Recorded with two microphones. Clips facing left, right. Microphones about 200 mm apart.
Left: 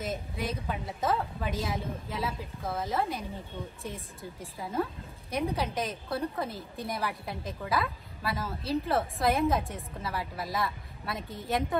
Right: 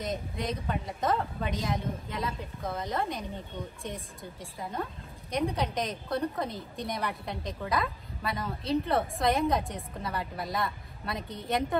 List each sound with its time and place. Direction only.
0.0 s a woman's voice: 5° left (ahead or behind)
3.6 s speech: 15° right (ahead or behind)
4.2 s a woman's voice: 5° left (ahead or behind)